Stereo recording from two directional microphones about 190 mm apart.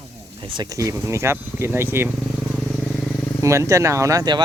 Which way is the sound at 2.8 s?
5° left (ahead or behind).